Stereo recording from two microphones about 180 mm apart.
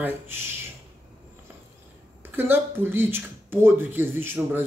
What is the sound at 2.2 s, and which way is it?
Speech, 10° right (ahead or behind).